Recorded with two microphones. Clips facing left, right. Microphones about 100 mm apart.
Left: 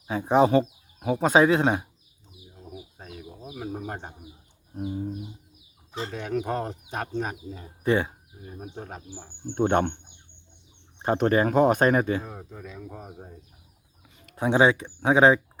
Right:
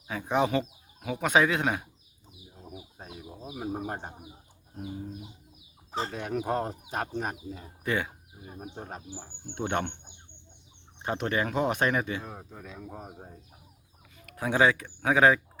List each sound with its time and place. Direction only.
0.1 s speech: 30° left (ahead or behind)
3.0 s speech: 15° right (ahead or behind)
6.1 s speech: 5° right (ahead or behind)
7.9 s speech: 30° left (ahead or behind)
8.4 s speech: 10° right (ahead or behind)
9.6 s speech: 40° left (ahead or behind)
11.0 s speech: 40° left (ahead or behind)
12.2 s speech: centre (ahead or behind)
14.3 s speech: 25° left (ahead or behind)